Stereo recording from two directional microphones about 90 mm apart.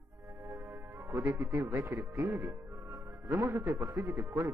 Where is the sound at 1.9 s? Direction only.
35° right (ahead or behind).